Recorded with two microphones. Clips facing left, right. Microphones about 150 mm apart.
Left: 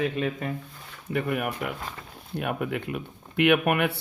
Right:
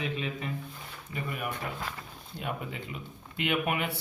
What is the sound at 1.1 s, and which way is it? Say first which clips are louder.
Speech: left 8 dB; 65° left (ahead or behind).